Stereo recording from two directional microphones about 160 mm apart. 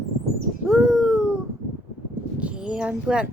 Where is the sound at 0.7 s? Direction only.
Centre (ahead or behind).